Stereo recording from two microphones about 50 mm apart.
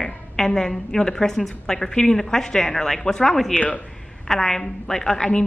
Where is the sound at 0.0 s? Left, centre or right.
Centre.